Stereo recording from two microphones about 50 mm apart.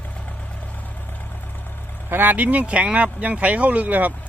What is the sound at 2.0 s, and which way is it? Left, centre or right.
Speech, right.